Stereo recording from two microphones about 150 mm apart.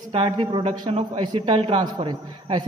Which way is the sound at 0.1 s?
40° right (ahead or behind).